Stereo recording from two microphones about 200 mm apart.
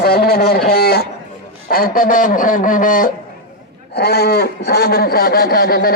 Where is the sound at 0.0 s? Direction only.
50° left (ahead or behind).